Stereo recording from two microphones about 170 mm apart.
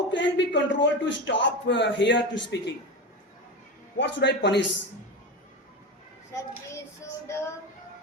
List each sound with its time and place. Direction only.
0.1 s a man's voice: 90° left
3.9 s a man's voice: 90° left
7.3 s music: 15° left (ahead or behind)